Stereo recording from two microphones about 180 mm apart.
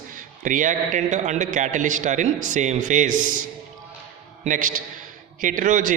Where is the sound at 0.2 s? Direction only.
45° right (ahead or behind).